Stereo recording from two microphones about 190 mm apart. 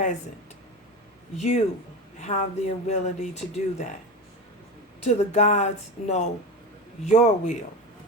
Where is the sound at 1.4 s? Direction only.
35° left (ahead or behind).